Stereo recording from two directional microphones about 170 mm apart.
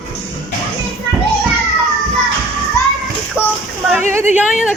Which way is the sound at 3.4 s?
5° right (ahead or behind).